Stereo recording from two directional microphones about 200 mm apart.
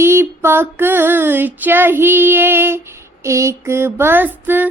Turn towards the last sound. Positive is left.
turn(degrees=-10)  # may be behind; listen again after turning